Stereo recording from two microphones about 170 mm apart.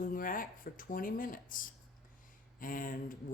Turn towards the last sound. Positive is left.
turn(degrees=55)  # may be behind; listen again after turning